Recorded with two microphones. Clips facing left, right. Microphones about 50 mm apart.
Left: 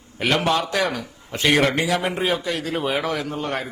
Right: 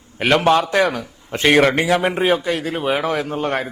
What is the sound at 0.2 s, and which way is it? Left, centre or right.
A man's voice, right.